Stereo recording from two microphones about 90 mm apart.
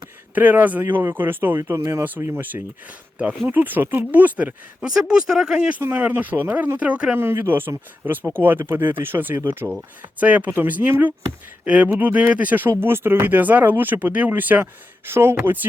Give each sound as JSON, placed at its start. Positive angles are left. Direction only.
{"t": 0.3, "sound": "speech", "side_deg": -20}
{"t": 4.8, "sound": "speech", "side_deg": -10}
{"t": 5.8, "sound": "speech", "side_deg": -20}
{"t": 7.3, "sound": "speech", "side_deg": -25}